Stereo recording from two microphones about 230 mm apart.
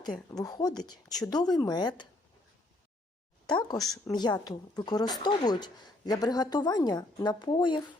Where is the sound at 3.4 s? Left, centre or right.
Centre.